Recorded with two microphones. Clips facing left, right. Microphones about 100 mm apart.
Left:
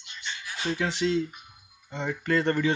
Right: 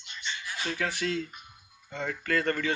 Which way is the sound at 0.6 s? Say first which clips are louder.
Left 5 dB; 20° left (ahead or behind).